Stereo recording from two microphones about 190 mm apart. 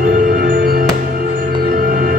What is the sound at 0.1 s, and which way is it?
Music, 50° right (ahead or behind).